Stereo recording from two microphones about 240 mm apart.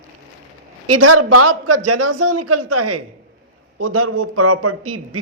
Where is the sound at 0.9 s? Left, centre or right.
Right.